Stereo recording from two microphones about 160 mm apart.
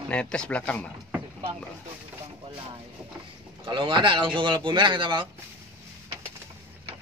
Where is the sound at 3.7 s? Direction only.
30° right (ahead or behind).